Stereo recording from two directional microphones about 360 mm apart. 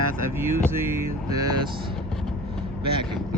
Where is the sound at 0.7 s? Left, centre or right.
Centre.